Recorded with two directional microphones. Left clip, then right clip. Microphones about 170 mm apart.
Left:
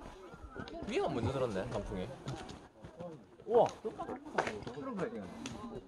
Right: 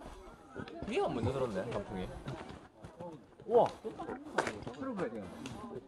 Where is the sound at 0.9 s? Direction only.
25° left (ahead or behind).